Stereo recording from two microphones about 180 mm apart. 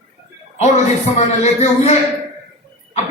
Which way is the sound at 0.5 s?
40° left (ahead or behind).